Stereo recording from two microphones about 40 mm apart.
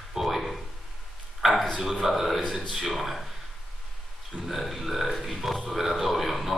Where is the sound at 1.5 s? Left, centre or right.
Centre.